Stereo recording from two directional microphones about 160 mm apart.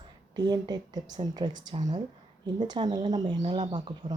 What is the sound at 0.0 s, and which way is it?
Speech, 25° right (ahead or behind).